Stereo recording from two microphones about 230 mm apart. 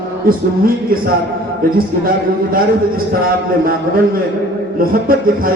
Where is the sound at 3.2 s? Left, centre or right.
Right.